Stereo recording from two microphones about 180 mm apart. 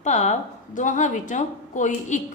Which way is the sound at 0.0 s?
40° left (ahead or behind).